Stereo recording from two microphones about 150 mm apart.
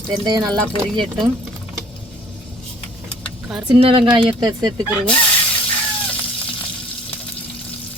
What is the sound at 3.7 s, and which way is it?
Speech, 35° right (ahead or behind).